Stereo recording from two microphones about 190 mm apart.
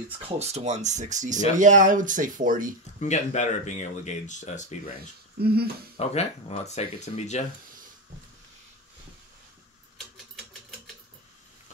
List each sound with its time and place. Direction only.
0.4 s speech: 35° right (ahead or behind)
3.0 s speech: 40° left (ahead or behind)
5.4 s speech: 55° right (ahead or behind)
5.9 s speech: 35° left (ahead or behind)